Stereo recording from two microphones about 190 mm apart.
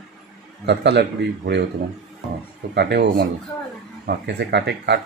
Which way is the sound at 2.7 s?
60° right (ahead or behind).